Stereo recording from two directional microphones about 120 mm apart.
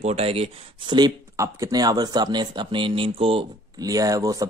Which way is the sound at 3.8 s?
30° right (ahead or behind).